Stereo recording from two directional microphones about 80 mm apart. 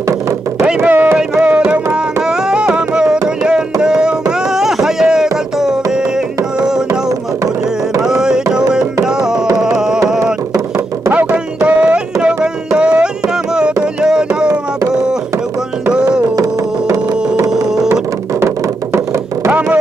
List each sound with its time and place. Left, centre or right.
0.7 s speech: centre
1.4 s a sound: centre
2.5 s carnatic music: centre
4.6 s music: centre
10.0 s music: centre
12.7 s carnatic music: centre
14.0 s music: centre
16.9 s music: right